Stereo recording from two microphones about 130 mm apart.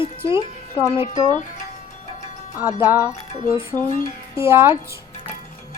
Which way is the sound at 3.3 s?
60° left (ahead or behind).